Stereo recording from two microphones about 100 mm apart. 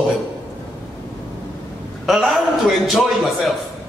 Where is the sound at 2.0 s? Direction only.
Centre (ahead or behind).